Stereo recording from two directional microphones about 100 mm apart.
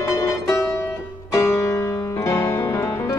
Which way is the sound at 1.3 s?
30° left (ahead or behind).